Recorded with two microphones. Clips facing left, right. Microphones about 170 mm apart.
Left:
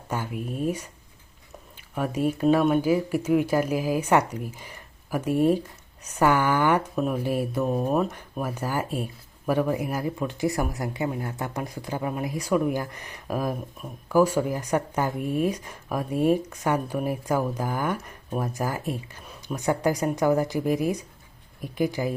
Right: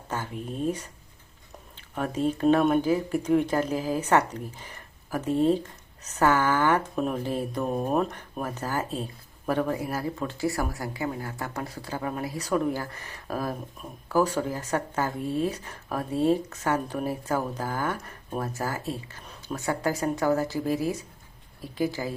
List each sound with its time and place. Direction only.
0.1 s speech: 10° left (ahead or behind)